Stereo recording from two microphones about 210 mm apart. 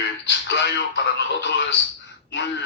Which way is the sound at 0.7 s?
55° left (ahead or behind).